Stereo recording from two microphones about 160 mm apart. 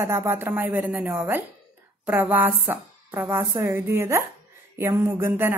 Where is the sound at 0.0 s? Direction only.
15° right (ahead or behind).